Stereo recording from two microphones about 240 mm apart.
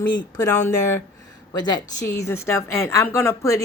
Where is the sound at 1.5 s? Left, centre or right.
Centre.